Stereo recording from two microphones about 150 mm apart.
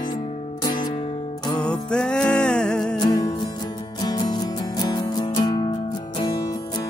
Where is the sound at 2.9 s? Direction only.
25° left (ahead or behind).